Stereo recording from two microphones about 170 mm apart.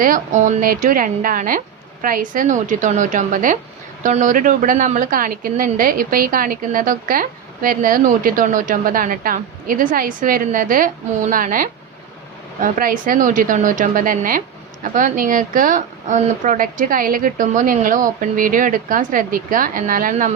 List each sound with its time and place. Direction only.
0.0 s speech: 50° right (ahead or behind)